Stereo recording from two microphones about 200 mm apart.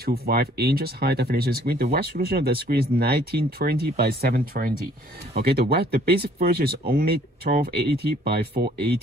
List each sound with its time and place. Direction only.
0.0 s speech: 50° right (ahead or behind)